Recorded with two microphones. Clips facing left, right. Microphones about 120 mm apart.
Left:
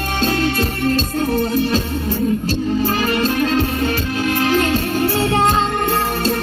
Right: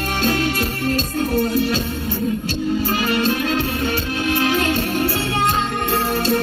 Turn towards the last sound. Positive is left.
turn(degrees=35)  # may be behind; listen again after turning